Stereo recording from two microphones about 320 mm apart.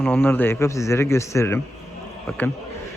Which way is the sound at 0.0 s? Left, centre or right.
Centre.